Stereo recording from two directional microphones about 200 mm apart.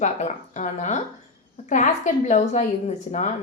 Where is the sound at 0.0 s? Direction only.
35° left (ahead or behind).